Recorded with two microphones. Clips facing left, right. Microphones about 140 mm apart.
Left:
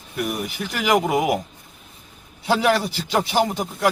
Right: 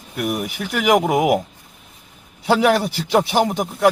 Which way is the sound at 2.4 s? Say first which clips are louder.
Right 3 dB; 10° right (ahead or behind).